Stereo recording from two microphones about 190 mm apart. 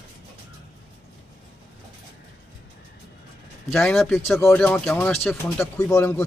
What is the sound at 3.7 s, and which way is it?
Speech, centre (ahead or behind).